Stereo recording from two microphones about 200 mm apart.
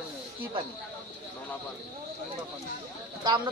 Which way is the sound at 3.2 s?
20° right (ahead or behind).